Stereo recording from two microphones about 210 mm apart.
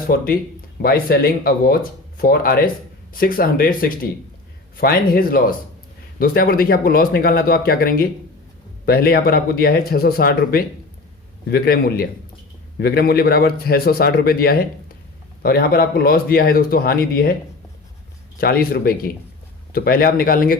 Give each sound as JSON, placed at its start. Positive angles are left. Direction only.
{"t": 0.1, "sound": "a man's voice", "side_deg": 45}
{"t": 18.3, "sound": "a man's voice", "side_deg": 45}